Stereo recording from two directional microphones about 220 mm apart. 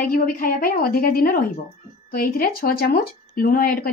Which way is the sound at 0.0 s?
40° left (ahead or behind).